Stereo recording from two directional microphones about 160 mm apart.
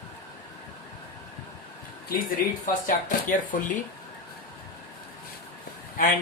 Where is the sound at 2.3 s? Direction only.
60° left (ahead or behind).